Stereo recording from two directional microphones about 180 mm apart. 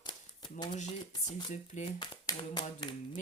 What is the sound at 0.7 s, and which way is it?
Speech, 40° left (ahead or behind).